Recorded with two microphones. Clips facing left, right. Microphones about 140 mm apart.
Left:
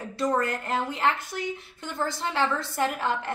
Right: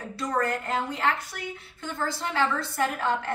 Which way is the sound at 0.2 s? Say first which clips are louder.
Left 2 dB; 25° left (ahead or behind).